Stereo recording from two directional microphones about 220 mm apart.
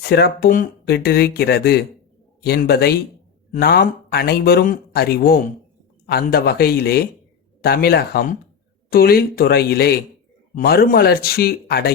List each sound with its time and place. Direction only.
0.0 s speech: 45° left (ahead or behind)